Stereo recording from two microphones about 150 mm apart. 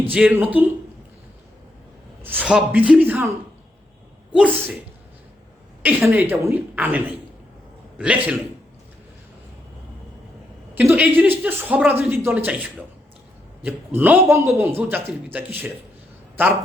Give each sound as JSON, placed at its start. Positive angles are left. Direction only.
{"t": 0.0, "sound": "a man's voice", "side_deg": -10}
{"t": 2.2, "sound": "a man's voice", "side_deg": -10}
{"t": 4.4, "sound": "speech", "side_deg": -5}
{"t": 5.8, "sound": "a man's voice", "side_deg": -10}
{"t": 10.8, "sound": "a man's voice", "side_deg": -10}